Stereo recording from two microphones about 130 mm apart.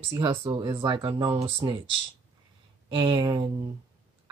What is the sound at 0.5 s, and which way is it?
Speech, 30° right (ahead or behind).